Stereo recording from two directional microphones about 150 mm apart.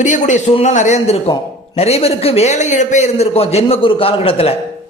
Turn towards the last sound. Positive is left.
turn(degrees=40)  # may be behind; listen again after turning